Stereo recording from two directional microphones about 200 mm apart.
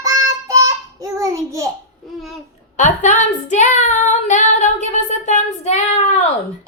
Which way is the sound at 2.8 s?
35° left (ahead or behind).